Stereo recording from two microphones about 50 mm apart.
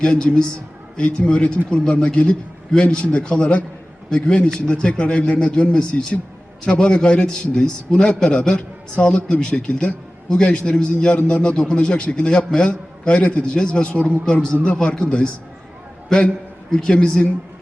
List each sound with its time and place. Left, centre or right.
0.0 s a man's voice: centre
4.7 s a man's voice: left